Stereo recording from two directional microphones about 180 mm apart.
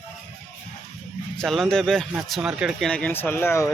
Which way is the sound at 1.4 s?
5° left (ahead or behind).